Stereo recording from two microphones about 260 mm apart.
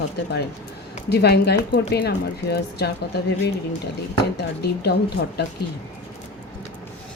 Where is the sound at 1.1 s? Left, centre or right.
Left.